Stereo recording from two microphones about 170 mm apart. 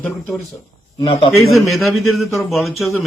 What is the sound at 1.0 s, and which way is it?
Speech, 30° left (ahead or behind).